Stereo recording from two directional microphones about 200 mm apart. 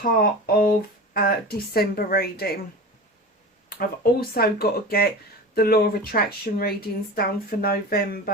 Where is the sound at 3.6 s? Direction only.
50° left (ahead or behind).